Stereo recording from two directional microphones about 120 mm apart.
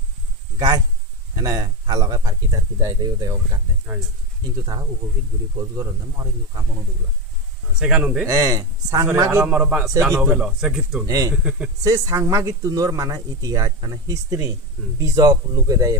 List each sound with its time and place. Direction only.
0.6 s a man's voice: 35° right (ahead or behind)
3.9 s a man's voice: 10° right (ahead or behind)
5.6 s speech: 30° right (ahead or behind)
7.8 s a man's voice: 5° right (ahead or behind)
8.3 s speech: 25° right (ahead or behind)
9.5 s a man's voice: 10° right (ahead or behind)
11.1 s speech: 30° right (ahead or behind)